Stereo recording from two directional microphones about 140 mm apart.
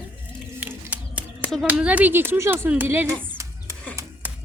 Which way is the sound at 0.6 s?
10° right (ahead or behind).